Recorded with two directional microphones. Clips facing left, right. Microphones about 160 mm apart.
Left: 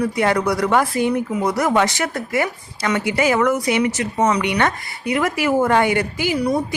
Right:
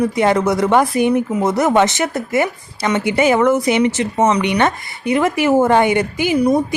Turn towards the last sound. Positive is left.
turn(degrees=-20)  # may be behind; listen again after turning